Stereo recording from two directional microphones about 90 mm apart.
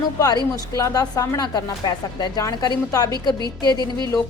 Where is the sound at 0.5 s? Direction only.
40° left (ahead or behind).